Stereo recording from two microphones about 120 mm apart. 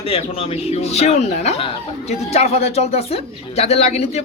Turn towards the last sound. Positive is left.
turn(degrees=60)  # may be behind; listen again after turning